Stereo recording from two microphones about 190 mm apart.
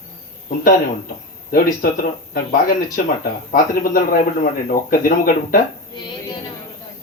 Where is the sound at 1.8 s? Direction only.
50° left (ahead or behind).